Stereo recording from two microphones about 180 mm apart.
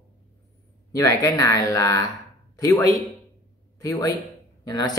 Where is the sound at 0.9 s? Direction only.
20° left (ahead or behind).